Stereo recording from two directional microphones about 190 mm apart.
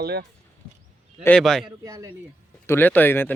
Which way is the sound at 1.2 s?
5° left (ahead or behind).